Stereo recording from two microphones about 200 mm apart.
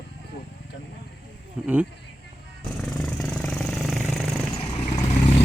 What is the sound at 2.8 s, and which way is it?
Vehicle, 5° left (ahead or behind).